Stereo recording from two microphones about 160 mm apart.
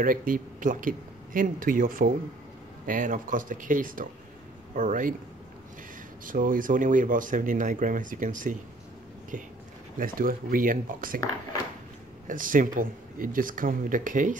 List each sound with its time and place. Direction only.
0.0 s speech: 60° right (ahead or behind)
6.2 s speech: 60° right (ahead or behind)
9.9 s speech: 65° right (ahead or behind)
12.3 s speech: 55° right (ahead or behind)